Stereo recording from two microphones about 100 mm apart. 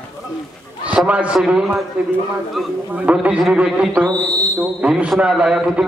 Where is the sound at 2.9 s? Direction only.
15° right (ahead or behind).